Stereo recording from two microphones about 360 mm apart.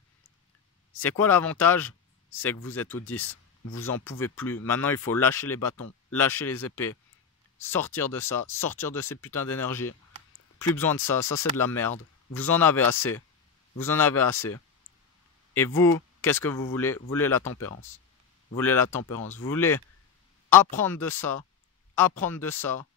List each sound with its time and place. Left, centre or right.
1.0 s speech: centre
5.8 s speech: left
6.1 s speech: centre
15.5 s speech: centre
18.6 s speech: centre